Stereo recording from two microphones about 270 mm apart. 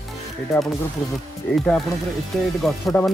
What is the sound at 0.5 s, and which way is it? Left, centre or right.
Speech, centre.